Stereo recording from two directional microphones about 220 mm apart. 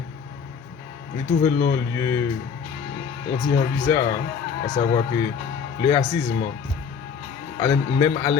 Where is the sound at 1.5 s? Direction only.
50° left (ahead or behind).